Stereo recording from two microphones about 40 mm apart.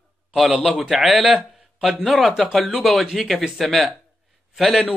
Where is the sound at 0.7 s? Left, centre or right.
Right.